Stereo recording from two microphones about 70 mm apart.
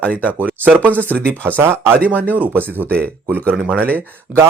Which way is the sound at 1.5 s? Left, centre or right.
Right.